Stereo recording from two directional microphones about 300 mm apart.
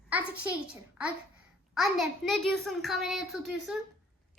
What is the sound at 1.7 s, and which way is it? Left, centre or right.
A child's voice, centre.